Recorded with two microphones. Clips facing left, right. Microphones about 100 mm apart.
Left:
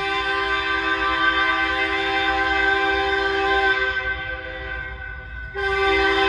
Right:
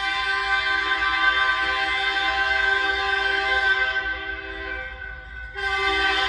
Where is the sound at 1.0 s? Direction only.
35° left (ahead or behind).